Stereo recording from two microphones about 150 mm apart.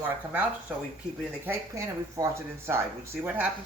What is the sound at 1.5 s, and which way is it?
Speech, 20° right (ahead or behind).